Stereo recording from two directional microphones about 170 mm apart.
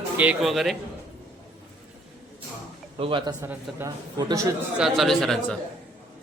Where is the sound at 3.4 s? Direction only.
15° right (ahead or behind).